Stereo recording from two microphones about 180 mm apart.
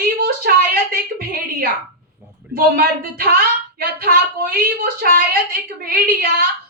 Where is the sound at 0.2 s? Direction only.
55° right (ahead or behind).